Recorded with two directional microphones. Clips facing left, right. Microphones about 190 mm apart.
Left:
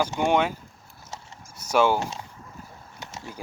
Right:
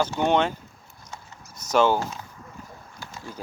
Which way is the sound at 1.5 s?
10° left (ahead or behind).